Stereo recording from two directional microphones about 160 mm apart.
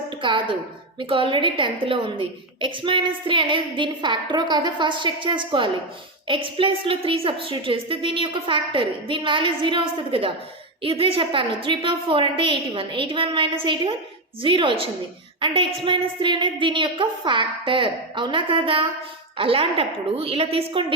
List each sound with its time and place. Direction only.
0.2 s a woman's voice: 30° right (ahead or behind)